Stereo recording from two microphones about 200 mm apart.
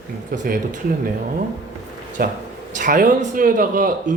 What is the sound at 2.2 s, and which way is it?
Speech, 45° right (ahead or behind).